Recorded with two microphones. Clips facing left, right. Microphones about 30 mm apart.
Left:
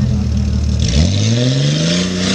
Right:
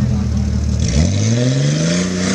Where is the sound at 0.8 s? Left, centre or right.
Left.